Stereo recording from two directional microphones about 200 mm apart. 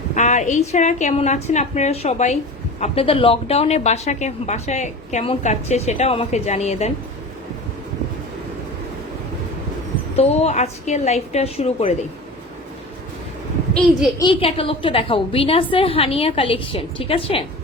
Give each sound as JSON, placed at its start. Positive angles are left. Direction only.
{"t": 0.1, "sound": "a sound", "side_deg": 35}
{"t": 0.7, "sound": "a woman's voice", "side_deg": 35}
{"t": 10.2, "sound": "a woman's voice", "side_deg": 35}
{"t": 14.2, "sound": "a woman's voice", "side_deg": 25}